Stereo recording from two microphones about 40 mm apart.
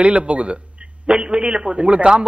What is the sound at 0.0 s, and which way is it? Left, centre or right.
A man's voice, right.